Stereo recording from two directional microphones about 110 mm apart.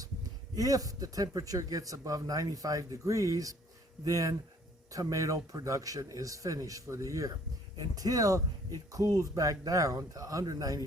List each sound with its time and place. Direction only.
0.5 s speech: 35° right (ahead or behind)